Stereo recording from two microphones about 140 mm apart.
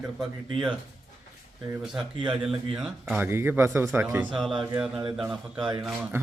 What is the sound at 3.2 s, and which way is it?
Speech, 15° right (ahead or behind).